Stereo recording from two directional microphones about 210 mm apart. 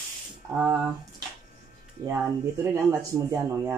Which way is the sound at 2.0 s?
10° right (ahead or behind).